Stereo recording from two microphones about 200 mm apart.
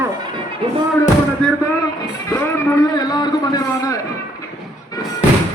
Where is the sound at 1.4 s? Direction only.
5° left (ahead or behind).